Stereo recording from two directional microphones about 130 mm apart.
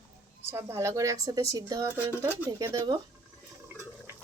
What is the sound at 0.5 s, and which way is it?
Speech, 20° right (ahead or behind).